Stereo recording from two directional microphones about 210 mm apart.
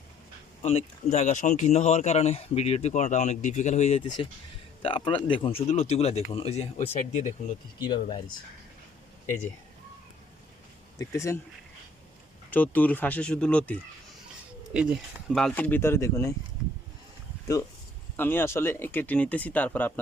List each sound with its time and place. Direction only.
0.6 s speech: 30° left (ahead or behind)
10.9 s speech: 15° left (ahead or behind)
12.5 s speech: 10° left (ahead or behind)
18.2 s speech: 10° left (ahead or behind)